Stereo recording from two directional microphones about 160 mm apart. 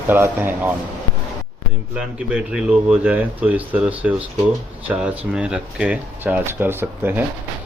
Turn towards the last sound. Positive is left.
turn(degrees=-10)  # may be behind; listen again after turning